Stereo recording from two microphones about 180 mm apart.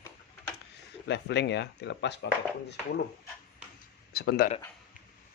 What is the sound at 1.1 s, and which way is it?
Speech, 70° left (ahead or behind).